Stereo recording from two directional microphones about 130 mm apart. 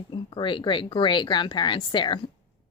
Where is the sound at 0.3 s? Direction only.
40° left (ahead or behind).